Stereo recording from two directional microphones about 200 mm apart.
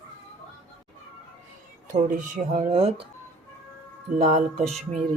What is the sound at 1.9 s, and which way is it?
Speech, 40° right (ahead or behind).